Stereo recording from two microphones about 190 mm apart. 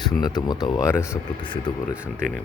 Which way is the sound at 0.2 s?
20° left (ahead or behind).